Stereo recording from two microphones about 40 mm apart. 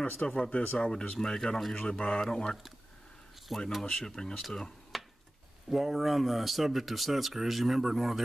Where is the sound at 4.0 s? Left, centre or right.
Centre.